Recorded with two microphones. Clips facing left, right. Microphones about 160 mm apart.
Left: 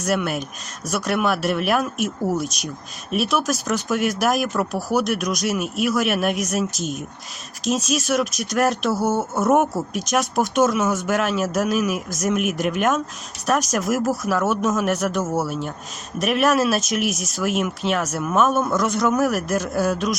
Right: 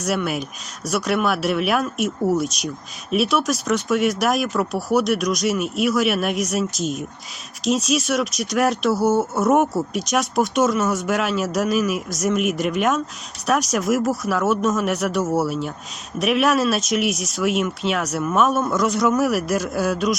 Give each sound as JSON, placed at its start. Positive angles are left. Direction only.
{"t": 0.0, "sound": "speech", "side_deg": 0}